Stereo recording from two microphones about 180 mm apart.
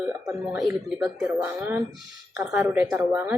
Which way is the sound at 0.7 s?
10° right (ahead or behind).